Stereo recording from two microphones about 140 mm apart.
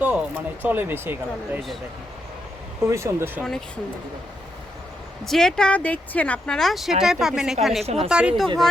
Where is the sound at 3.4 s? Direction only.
5° left (ahead or behind).